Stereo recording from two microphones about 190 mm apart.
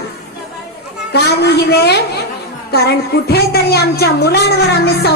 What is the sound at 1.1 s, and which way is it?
A woman's voice, 60° left (ahead or behind).